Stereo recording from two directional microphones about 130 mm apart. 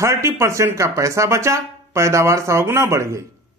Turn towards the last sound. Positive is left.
turn(degrees=-20)  # may be behind; listen again after turning